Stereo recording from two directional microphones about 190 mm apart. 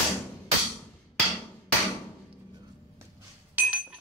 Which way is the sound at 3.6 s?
10° right (ahead or behind).